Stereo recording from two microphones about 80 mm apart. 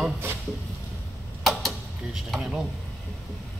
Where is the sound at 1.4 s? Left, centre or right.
Centre.